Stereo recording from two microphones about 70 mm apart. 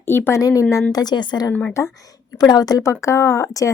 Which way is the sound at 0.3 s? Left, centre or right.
Left.